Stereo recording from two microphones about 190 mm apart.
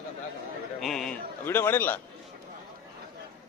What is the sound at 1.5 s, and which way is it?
Speech, 10° left (ahead or behind).